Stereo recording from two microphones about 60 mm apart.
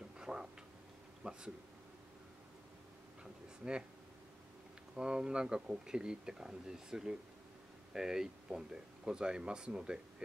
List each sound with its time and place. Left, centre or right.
0.2 s tick-tock: centre
1.2 s speech: centre
4.9 s speech: centre